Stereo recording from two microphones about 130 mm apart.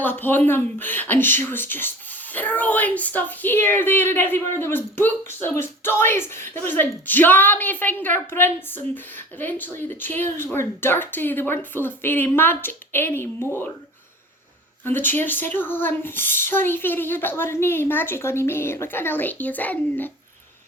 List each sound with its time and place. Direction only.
0.0 s speech: 15° left (ahead or behind)
14.8 s speech: 15° left (ahead or behind)